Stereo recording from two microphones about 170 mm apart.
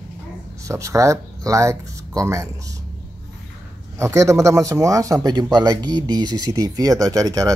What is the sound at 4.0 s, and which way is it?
Speech, 20° right (ahead or behind).